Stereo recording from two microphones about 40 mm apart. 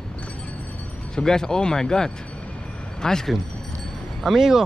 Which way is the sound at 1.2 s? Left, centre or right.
Centre.